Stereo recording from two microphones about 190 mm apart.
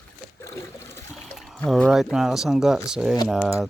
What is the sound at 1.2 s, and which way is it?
Speech, centre (ahead or behind).